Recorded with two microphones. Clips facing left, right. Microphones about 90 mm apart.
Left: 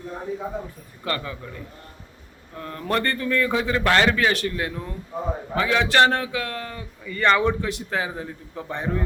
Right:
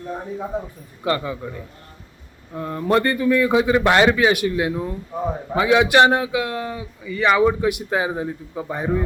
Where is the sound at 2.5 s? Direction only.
20° right (ahead or behind).